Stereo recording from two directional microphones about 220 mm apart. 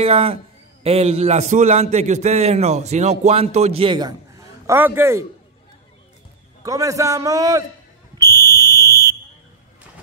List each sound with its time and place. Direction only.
0.0 s a man's voice: 25° right (ahead or behind); by 5.2 s 10° right (ahead or behind)
6.6 s a man's voice: 15° right (ahead or behind)
8.2 s fire alarm: 15° right (ahead or behind)